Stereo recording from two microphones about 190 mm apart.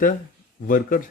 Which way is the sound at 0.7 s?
45° left (ahead or behind).